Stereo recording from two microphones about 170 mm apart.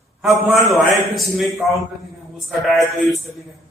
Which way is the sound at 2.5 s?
Centre (ahead or behind).